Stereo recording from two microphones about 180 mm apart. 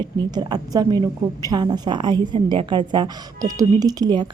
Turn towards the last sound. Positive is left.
turn(degrees=-25)  # may be behind; listen again after turning